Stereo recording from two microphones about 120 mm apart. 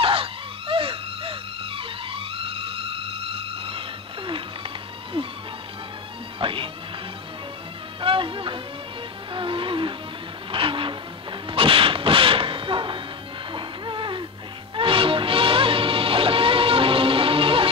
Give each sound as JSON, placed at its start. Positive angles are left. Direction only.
{"t": 0.0, "sound": "music", "side_deg": -50}
{"t": 4.3, "sound": "a sound", "side_deg": -45}
{"t": 6.4, "sound": "music", "side_deg": -45}
{"t": 8.0, "sound": "music", "side_deg": -45}
{"t": 10.5, "sound": "train", "side_deg": -45}
{"t": 11.4, "sound": "a sound", "side_deg": -50}
{"t": 13.5, "sound": "music", "side_deg": -45}